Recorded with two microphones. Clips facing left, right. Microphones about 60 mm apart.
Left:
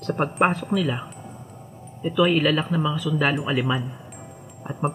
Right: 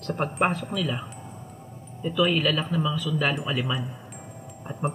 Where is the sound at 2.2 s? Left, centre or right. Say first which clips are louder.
Left 4 dB; centre.